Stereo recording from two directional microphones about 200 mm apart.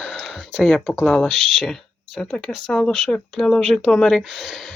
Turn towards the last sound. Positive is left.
turn(degrees=0)  # may be behind; listen again after turning